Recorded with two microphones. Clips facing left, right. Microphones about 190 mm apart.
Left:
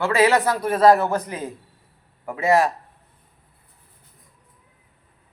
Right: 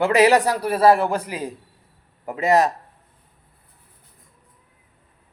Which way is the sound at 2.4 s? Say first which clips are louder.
Right 1 dB; 20° right (ahead or behind).